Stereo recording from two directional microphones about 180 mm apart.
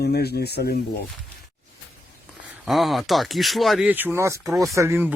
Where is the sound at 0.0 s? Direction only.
60° left (ahead or behind).